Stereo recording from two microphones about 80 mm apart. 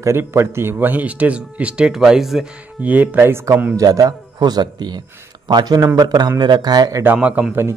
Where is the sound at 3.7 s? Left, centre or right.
Right.